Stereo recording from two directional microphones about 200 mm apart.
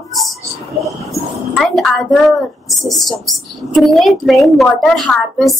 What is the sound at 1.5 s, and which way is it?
A woman's voice, 5° left (ahead or behind).